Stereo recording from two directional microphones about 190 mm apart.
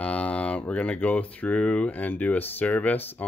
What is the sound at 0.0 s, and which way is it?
Speech, 5° left (ahead or behind).